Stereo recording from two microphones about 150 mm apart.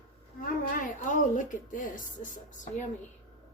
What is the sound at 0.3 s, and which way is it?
A woman's voice, 65° left (ahead or behind).